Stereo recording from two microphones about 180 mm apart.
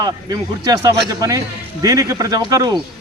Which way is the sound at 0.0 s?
20° right (ahead or behind).